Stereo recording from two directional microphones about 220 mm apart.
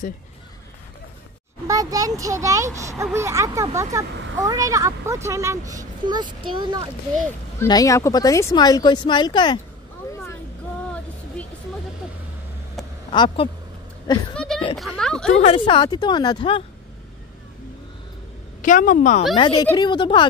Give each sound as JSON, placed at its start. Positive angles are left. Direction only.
{"t": 1.7, "sound": "a child's voice", "side_deg": -15}
{"t": 7.2, "sound": "speech", "side_deg": 15}
{"t": 12.8, "sound": "a sound", "side_deg": 0}
{"t": 13.1, "sound": "speech", "side_deg": 20}
{"t": 14.3, "sound": "a sound", "side_deg": 5}
{"t": 14.8, "sound": "speech", "side_deg": 5}
{"t": 15.3, "sound": "speech", "side_deg": 25}
{"t": 18.6, "sound": "a woman's voice", "side_deg": 35}
{"t": 19.3, "sound": "speech", "side_deg": 20}